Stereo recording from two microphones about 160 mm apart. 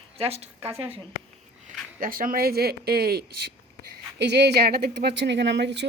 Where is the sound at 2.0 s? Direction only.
60° right (ahead or behind).